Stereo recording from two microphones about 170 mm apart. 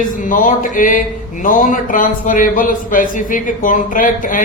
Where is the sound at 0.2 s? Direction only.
50° left (ahead or behind).